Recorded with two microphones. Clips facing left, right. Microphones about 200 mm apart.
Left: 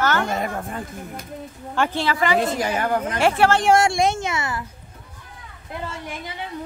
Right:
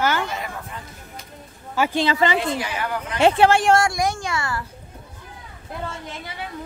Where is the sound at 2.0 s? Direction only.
20° right (ahead or behind).